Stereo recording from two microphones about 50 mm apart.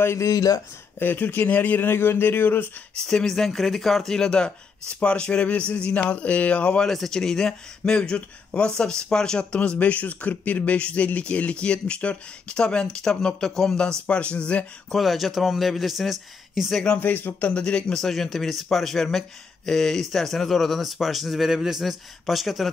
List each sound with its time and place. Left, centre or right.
0.0 s speech: left
0.9 s speech: left
1.9 s speech: left
3.1 s speech: centre; by 6.9 s left
6.9 s speech: centre
14.0 s speech: left
14.9 s speech: centre
17.0 s speech: left
17.4 s speech: left
17.9 s speech: centre